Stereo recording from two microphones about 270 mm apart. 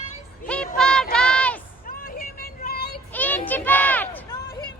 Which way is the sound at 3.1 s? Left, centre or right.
Centre.